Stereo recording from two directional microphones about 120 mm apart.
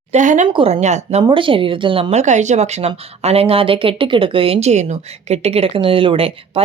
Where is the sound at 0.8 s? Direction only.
75° right (ahead or behind).